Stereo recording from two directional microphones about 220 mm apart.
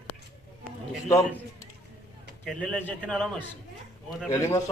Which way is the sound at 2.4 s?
Centre (ahead or behind).